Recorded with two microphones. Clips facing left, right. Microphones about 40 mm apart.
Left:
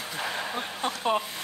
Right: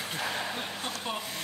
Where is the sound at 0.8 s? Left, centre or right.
Left.